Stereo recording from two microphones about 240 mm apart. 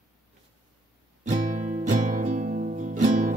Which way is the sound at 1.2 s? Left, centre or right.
Right.